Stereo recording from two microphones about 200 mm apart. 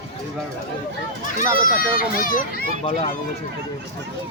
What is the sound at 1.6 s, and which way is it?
A child's voice, 45° left (ahead or behind).